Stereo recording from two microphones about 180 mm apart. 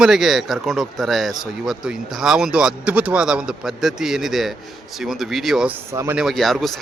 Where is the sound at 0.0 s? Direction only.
Centre (ahead or behind).